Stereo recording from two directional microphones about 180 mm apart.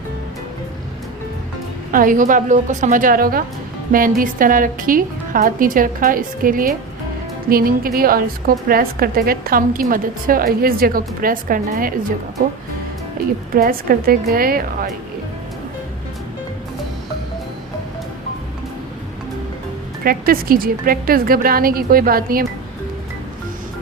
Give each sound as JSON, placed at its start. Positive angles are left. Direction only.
{"t": 1.9, "sound": "a woman's voice", "side_deg": -50}
{"t": 13.6, "sound": "a woman's voice", "side_deg": -55}
{"t": 20.1, "sound": "a woman's voice", "side_deg": -55}